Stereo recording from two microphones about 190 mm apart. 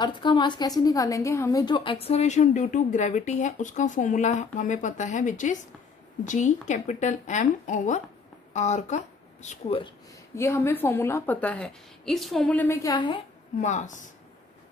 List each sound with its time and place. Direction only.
0.0 s a woman's voice: 25° left (ahead or behind)
10.3 s a woman's voice: 15° left (ahead or behind)
13.6 s a woman's voice: 40° left (ahead or behind)